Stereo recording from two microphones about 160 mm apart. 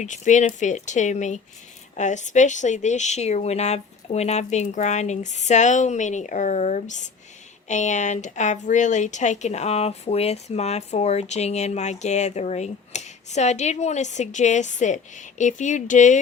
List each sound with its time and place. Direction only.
0.0 s speech: 50° left (ahead or behind)